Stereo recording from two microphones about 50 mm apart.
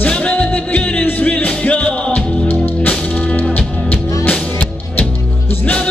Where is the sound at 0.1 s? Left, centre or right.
Left.